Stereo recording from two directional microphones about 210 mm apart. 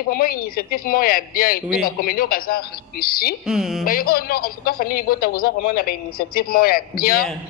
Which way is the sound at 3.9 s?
45° left (ahead or behind).